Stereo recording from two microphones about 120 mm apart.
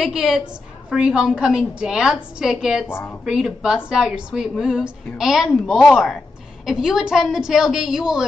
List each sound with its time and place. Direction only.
0.0 s a woman's voice: 5° right (ahead or behind)
2.9 s a woman's voice: 15° left (ahead or behind)
3.3 s a woman's voice: 5° right (ahead or behind)